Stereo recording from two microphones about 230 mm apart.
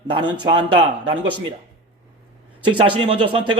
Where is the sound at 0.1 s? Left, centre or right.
Centre.